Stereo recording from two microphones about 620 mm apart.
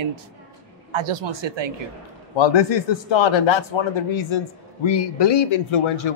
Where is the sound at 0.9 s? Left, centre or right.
Right.